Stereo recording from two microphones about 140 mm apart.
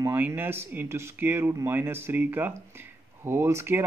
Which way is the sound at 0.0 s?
15° right (ahead or behind).